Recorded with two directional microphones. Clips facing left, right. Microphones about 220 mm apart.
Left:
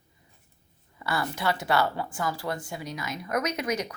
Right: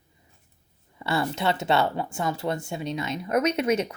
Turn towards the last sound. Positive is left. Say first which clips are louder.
# right 6 dB
turn(degrees=-25)  # may be behind; listen again after turning